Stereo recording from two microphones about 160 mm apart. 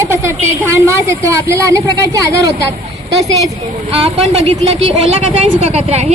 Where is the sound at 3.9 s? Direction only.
40° right (ahead or behind).